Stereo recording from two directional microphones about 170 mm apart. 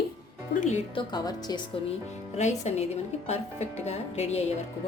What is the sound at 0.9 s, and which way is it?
Speech, 25° left (ahead or behind).